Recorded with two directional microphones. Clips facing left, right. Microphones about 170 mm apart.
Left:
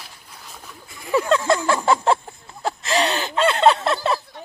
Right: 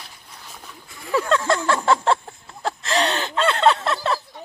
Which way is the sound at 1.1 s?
10° left (ahead or behind).